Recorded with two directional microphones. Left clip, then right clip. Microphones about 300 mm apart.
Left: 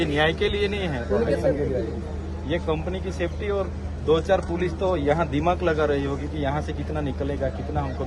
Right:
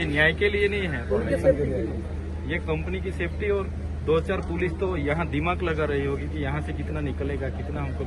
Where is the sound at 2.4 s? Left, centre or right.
Left.